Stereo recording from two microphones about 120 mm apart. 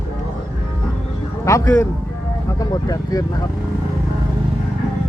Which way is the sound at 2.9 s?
30° left (ahead or behind).